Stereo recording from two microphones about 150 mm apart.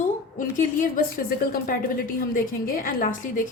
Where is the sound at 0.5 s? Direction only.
75° left (ahead or behind).